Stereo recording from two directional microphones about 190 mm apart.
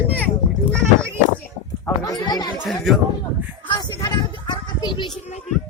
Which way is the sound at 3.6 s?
25° left (ahead or behind).